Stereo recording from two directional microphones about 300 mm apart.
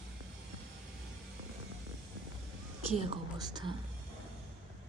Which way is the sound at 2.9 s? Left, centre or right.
Centre.